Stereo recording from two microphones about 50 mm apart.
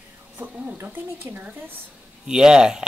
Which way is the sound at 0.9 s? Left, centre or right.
Right.